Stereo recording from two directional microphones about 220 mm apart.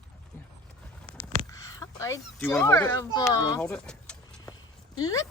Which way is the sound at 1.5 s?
15° left (ahead or behind).